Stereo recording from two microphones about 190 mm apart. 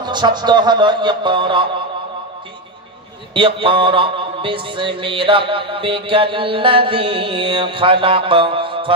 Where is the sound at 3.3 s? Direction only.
25° right (ahead or behind).